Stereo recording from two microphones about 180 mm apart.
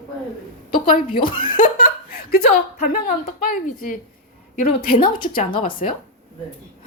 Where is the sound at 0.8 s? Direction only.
30° left (ahead or behind).